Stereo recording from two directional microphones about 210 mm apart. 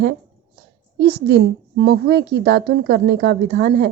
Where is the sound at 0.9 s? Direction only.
50° right (ahead or behind).